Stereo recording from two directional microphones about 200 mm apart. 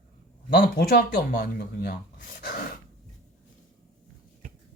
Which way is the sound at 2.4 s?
50° left (ahead or behind).